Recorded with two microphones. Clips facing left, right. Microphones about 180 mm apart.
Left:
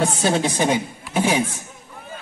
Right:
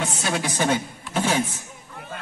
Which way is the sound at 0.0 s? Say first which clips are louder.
Left 7 dB; 25° left (ahead or behind).